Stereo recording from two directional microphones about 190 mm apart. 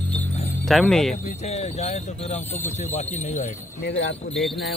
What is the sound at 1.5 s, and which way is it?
Speech, 35° left (ahead or behind).